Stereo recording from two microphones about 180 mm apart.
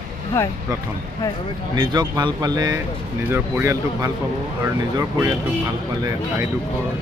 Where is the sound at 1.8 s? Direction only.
25° right (ahead or behind).